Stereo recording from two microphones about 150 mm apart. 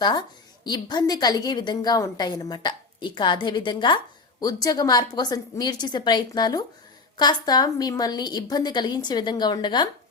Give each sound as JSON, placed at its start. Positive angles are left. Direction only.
{"t": 0.0, "sound": "a woman's voice", "side_deg": 30}